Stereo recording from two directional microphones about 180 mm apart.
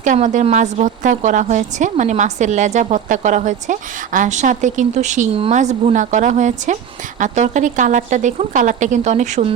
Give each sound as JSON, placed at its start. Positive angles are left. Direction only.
{"t": 0.0, "sound": "a woman's voice", "side_deg": -45}